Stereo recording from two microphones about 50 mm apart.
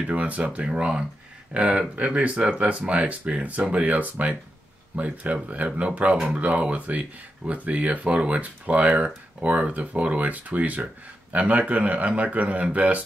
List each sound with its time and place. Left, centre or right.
0.0 s speech: right